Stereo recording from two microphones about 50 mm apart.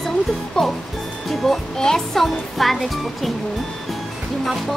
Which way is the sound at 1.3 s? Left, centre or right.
Centre.